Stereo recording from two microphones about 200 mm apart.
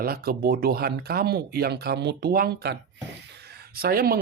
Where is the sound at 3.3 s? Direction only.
55° right (ahead or behind).